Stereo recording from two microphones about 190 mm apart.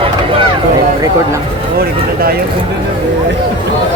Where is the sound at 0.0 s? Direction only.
30° right (ahead or behind).